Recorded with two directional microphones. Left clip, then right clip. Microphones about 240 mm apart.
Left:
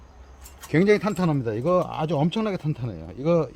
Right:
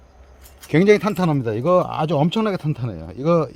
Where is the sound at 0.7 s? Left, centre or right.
Right.